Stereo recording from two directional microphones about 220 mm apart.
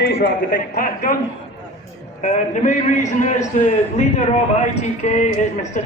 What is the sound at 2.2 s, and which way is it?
A man's voice, 35° left (ahead or behind).